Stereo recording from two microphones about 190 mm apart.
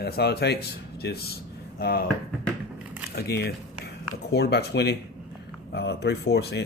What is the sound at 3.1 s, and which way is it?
Speech, 55° left (ahead or behind).